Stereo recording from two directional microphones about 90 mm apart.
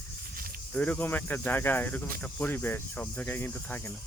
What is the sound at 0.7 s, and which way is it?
Speech, 15° left (ahead or behind).